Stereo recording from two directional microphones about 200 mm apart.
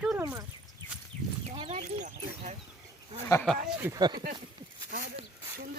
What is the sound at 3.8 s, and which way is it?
Speech, 15° right (ahead or behind).